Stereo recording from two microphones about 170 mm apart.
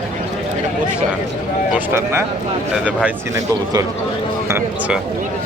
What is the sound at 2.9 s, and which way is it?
Speech, 10° right (ahead or behind).